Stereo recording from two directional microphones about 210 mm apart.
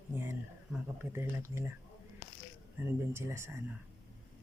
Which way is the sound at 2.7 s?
10° right (ahead or behind).